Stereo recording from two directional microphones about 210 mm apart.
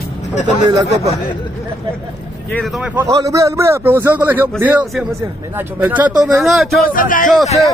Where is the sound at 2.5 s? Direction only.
Centre (ahead or behind).